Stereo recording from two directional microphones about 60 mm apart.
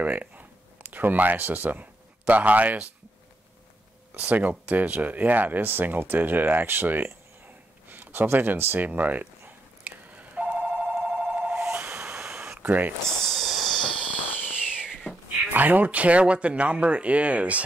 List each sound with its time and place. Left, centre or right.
0.0 s speech: right
4.1 s speech: right
9.8 s telephone bell ringing: right
11.7 s train: right
12.6 s speech: right
13.2 s a sound: centre
14.4 s fireworks: centre
15.5 s speech: right